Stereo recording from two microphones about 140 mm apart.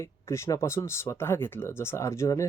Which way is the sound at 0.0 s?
20° left (ahead or behind).